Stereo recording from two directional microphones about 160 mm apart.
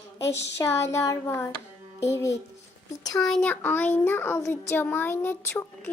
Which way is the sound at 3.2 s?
5° left (ahead or behind).